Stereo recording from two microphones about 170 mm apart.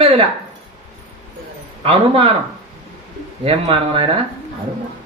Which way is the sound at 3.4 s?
30° right (ahead or behind).